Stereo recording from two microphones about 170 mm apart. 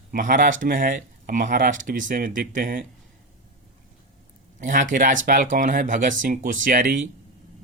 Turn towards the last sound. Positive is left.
turn(degrees=-55)  # may be behind; listen again after turning